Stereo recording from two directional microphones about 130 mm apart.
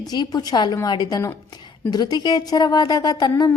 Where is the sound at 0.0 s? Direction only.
30° left (ahead or behind).